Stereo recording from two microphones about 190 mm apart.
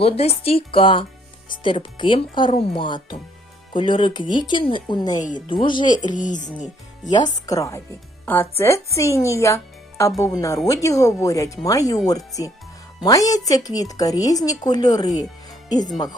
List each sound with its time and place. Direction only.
0.0 s a woman's voice: 30° left (ahead or behind)
6.1 s speech: 40° left (ahead or behind)
7.4 s a woman's voice: 15° left (ahead or behind)